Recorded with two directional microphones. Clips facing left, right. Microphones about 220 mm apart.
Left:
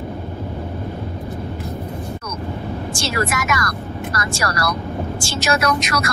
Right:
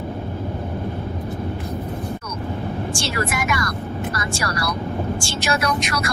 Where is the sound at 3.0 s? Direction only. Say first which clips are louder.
Left 4 dB; 90° left.